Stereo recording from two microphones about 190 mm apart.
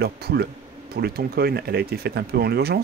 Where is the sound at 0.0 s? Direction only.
60° right (ahead or behind).